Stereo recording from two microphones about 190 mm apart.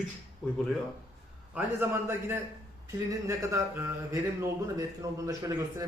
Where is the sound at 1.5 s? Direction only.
10° right (ahead or behind).